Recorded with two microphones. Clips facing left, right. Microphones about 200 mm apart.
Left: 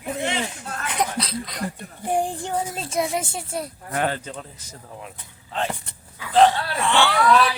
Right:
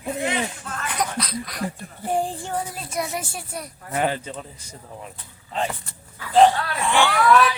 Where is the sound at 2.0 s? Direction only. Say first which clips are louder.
Left 1 dB; 15° left (ahead or behind).